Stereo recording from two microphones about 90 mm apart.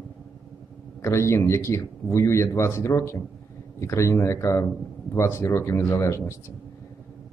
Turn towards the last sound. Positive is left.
turn(degrees=30)  # may be behind; listen again after turning